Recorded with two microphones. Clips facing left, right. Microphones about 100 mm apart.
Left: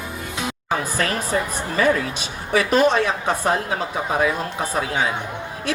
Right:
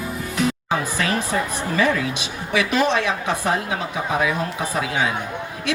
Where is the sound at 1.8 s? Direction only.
40° left (ahead or behind).